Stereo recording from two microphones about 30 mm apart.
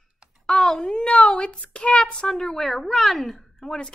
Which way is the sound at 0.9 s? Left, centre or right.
Left.